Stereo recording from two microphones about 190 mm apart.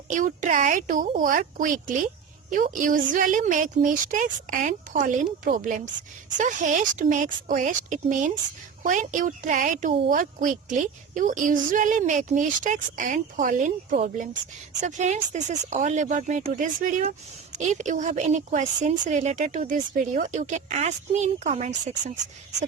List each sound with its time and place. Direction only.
0.1 s a woman's voice: 40° right (ahead or behind)